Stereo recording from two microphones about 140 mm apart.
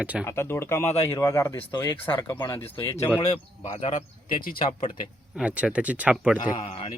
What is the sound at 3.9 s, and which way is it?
Speech, 75° left (ahead or behind).